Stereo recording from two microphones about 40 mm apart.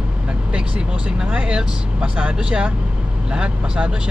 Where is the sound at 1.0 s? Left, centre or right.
Right.